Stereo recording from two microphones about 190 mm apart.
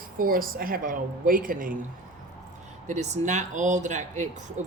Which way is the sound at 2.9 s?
35° right (ahead or behind).